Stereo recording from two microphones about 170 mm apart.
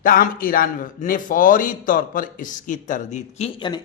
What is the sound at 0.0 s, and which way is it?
A man's voice, 55° left (ahead or behind).